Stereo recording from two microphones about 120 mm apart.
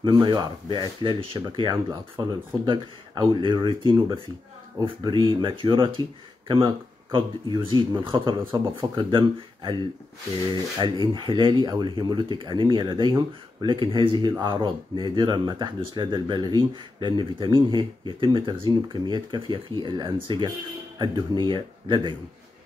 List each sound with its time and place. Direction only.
0.0 s speech: 35° right (ahead or behind)